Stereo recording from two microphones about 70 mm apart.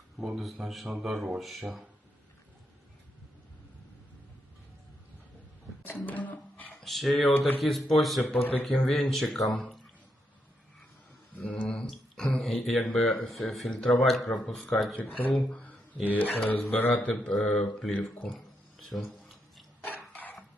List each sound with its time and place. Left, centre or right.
0.2 s speech: centre
5.9 s music: left
6.8 s speech: centre
8.3 s speech: left
8.7 s speech: centre
11.3 s a sound: centre
12.4 s speech: centre
14.9 s speech: left
15.3 s speech: centre
16.1 s speech: left; by 19.1 s centre